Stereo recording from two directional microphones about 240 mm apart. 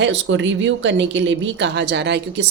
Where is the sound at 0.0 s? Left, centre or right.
Right.